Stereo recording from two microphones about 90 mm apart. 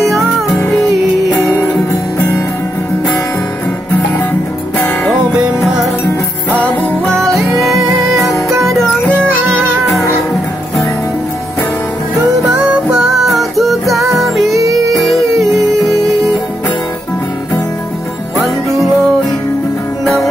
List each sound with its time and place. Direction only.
0.0 s music: centre (ahead or behind)
5.6 s music: centre (ahead or behind)
6.5 s music: 15° left (ahead or behind)
7.4 s music: centre (ahead or behind)
12.4 s music: 5° right (ahead or behind)
14.6 s music: 35° right (ahead or behind)
14.9 s music: centre (ahead or behind)
18.4 s music: centre (ahead or behind)